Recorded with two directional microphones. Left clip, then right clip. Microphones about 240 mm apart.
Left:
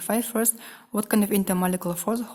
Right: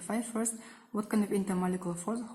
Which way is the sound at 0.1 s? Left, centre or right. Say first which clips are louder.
Left 9 dB; left.